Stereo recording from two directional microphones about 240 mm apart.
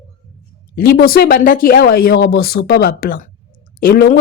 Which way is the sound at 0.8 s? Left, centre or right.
Left.